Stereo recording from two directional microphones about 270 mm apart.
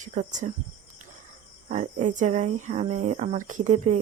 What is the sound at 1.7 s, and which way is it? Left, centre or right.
Speech, right.